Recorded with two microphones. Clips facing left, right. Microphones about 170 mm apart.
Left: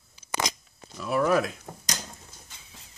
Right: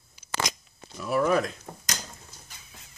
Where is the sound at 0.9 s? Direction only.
Centre (ahead or behind).